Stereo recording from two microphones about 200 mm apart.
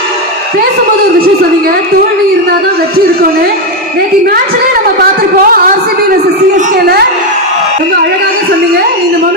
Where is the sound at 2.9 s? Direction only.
50° right (ahead or behind).